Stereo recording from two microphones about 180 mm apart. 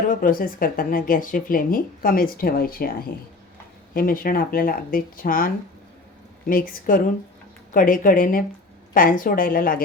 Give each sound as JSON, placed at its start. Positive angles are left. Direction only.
{"t": 0.1, "sound": "speech", "side_deg": 50}
{"t": 3.9, "sound": "speech", "side_deg": 50}
{"t": 6.5, "sound": "speech", "side_deg": 50}